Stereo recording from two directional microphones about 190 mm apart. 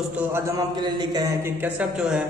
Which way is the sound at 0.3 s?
20° right (ahead or behind).